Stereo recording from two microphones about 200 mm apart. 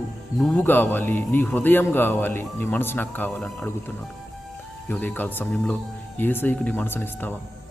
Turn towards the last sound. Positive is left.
turn(degrees=10)  # may be behind; listen again after turning